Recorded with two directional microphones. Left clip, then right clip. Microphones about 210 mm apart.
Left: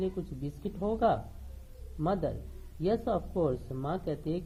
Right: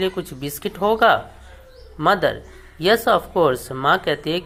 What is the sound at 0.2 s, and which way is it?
Speech, 45° right (ahead or behind).